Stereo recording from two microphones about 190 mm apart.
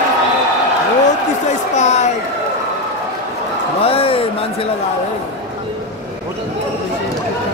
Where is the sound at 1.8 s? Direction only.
35° left (ahead or behind).